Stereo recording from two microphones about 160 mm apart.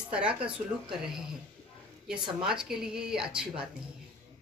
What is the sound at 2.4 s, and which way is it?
Speech, 5° right (ahead or behind).